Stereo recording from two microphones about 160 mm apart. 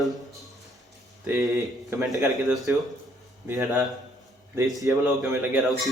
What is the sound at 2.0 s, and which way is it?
Speech, 20° right (ahead or behind).